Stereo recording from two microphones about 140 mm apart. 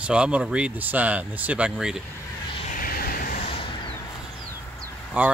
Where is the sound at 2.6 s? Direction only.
80° left.